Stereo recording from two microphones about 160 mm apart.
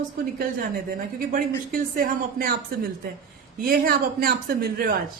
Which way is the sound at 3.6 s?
70° right (ahead or behind).